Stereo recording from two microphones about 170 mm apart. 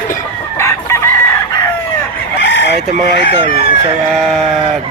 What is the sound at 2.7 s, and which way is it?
Speech, 35° right (ahead or behind).